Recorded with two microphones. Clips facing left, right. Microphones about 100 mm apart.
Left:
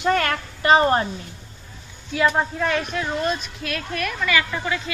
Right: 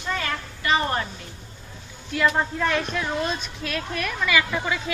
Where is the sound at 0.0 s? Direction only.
70° left (ahead or behind).